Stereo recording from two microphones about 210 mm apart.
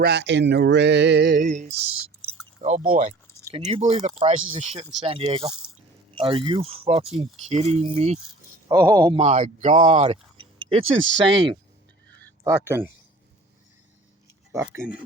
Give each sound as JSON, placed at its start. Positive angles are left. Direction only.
{"t": 0.0, "sound": "speech", "side_deg": -55}
{"t": 2.2, "sound": "drip", "side_deg": -35}
{"t": 3.5, "sound": "speech", "side_deg": -25}
{"t": 8.6, "sound": "speech", "side_deg": -15}
{"t": 9.0, "sound": "speech", "side_deg": -30}
{"t": 10.8, "sound": "speech", "side_deg": -65}
{"t": 12.5, "sound": "speech", "side_deg": -10}
{"t": 14.6, "sound": "speech", "side_deg": -10}